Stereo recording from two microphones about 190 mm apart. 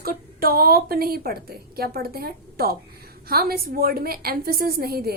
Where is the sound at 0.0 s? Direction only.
50° right (ahead or behind).